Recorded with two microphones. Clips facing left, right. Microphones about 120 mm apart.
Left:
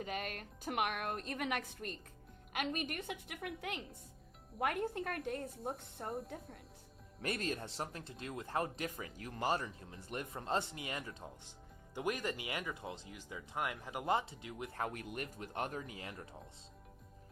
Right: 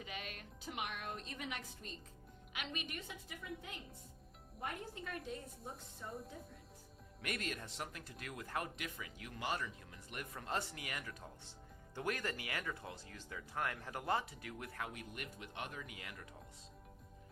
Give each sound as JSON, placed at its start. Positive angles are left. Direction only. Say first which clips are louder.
{"t": 0.0, "sound": "a woman's voice", "louder": "left 7 dB", "side_deg": 50}
{"t": 4.6, "sound": "speech", "louder": "left 9 dB", "side_deg": 60}
{"t": 7.2, "sound": "speech", "louder": "left 5 dB", "side_deg": 30}
{"t": 14.8, "sound": "speech", "louder": "left 9 dB", "side_deg": 45}